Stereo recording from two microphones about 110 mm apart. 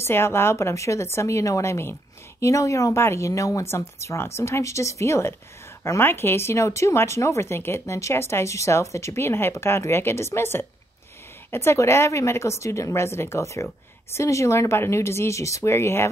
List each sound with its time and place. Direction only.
0.0 s speech: 20° left (ahead or behind)